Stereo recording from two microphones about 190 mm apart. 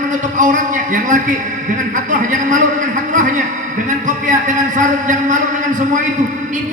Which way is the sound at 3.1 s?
40° right (ahead or behind).